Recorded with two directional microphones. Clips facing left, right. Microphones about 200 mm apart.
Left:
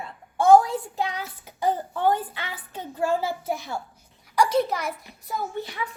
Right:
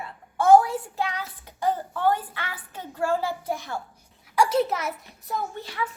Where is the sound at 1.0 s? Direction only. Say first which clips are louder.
Left 1 dB; 15° left (ahead or behind).